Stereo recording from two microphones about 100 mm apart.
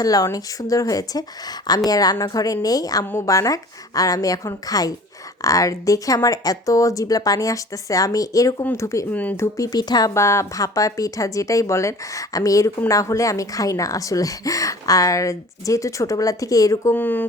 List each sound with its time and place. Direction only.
0.0 s a woman's voice: 40° left (ahead or behind)
10.2 s a woman's voice: 30° left (ahead or behind)
16.9 s speech: 20° left (ahead or behind)